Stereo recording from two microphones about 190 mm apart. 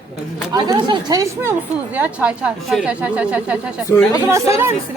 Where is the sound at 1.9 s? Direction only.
10° right (ahead or behind).